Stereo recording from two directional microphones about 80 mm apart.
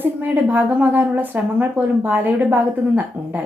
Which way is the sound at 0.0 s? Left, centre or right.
Right.